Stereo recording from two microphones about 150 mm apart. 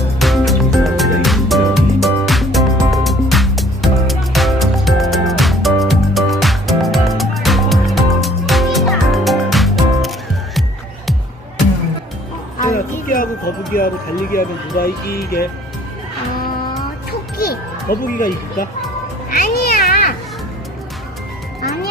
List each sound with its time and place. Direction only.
0.2 s music: centre (ahead or behind)
12.5 s music: 65° left (ahead or behind)
13.7 s speech: 80° left
17.1 s music: 90° left; by 18.7 s 70° left (ahead or behind)
19.3 s cat: 80° left